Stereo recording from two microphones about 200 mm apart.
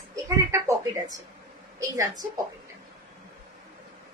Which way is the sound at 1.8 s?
15° right (ahead or behind).